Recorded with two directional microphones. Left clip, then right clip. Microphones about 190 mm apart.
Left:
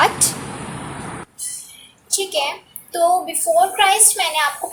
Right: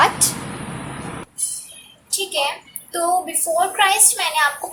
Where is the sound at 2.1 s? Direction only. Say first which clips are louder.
Left 1 dB; 15° left (ahead or behind).